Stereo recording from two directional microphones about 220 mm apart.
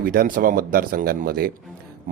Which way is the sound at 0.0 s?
40° right (ahead or behind).